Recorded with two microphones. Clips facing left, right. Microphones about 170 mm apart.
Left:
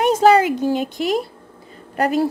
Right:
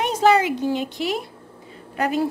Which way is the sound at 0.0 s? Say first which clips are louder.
Left 4 dB; 45° left (ahead or behind).